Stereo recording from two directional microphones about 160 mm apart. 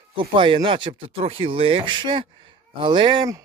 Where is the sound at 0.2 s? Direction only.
30° right (ahead or behind).